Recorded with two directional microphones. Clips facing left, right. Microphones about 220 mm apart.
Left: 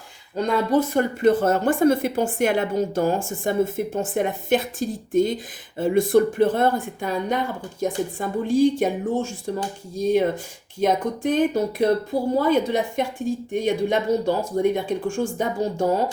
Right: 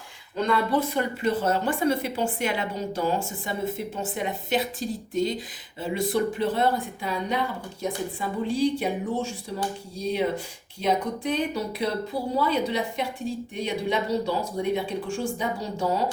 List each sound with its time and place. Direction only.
0.4 s a woman's voice: 40° left (ahead or behind)